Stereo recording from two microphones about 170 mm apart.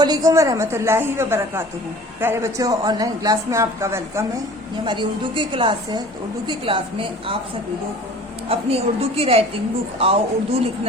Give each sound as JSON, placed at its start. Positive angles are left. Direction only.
{"t": 0.0, "sound": "a woman's voice", "side_deg": -20}
{"t": 4.9, "sound": "a woman's voice", "side_deg": -30}
{"t": 8.4, "sound": "a woman's voice", "side_deg": -35}